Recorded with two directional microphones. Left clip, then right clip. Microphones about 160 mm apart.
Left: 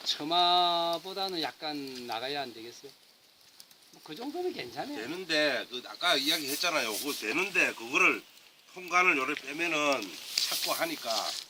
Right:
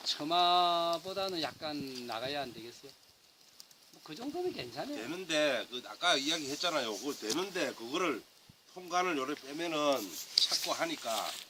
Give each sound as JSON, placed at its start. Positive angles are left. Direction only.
{"t": 0.1, "sound": "speech", "side_deg": -30}
{"t": 4.5, "sound": "speech", "side_deg": -20}
{"t": 4.9, "sound": "speech", "side_deg": -5}